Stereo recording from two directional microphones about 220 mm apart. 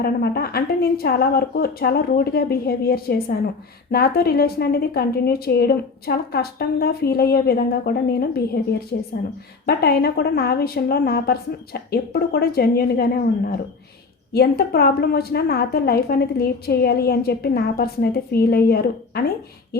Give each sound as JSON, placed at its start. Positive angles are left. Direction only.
{"t": 0.0, "sound": "a woman's voice", "side_deg": 45}